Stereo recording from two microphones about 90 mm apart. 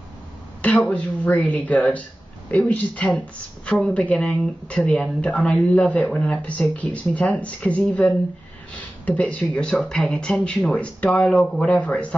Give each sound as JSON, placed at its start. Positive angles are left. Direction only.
{"t": 0.6, "sound": "speech", "side_deg": 15}